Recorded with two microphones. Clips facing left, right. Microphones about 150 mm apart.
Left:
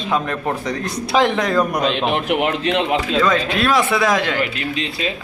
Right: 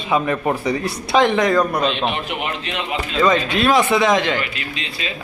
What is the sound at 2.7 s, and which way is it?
Speech, 60° left (ahead or behind).